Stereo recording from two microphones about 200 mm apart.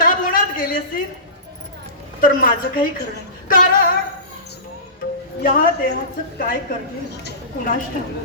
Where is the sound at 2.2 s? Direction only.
45° left (ahead or behind).